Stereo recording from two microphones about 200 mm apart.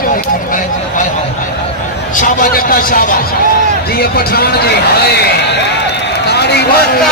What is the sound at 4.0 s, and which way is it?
Speech, 50° left (ahead or behind).